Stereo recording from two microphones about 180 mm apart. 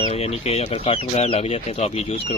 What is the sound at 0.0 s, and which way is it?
Speech, 35° left (ahead or behind).